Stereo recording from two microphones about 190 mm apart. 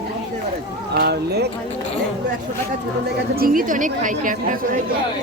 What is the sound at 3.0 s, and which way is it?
A woman's voice, 50° right (ahead or behind).